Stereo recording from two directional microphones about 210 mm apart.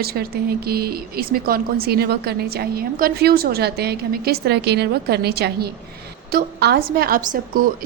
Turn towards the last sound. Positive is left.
turn(degrees=-40)  # may be behind; listen again after turning